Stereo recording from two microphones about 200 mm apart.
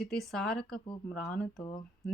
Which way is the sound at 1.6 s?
25° left (ahead or behind).